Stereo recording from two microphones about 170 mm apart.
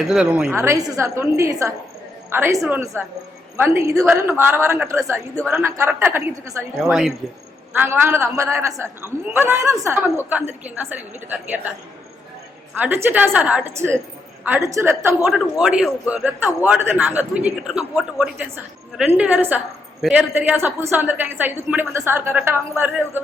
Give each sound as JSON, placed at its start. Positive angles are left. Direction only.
{"t": 0.0, "sound": "a man's voice", "side_deg": -5}
{"t": 12.7, "sound": "a man's voice", "side_deg": -10}
{"t": 15.3, "sound": "a man's voice", "side_deg": -5}